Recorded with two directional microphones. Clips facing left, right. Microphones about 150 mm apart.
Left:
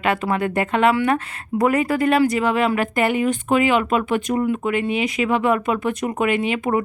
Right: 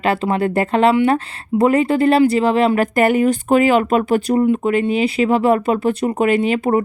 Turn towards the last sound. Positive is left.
turn(degrees=-35)  # may be behind; listen again after turning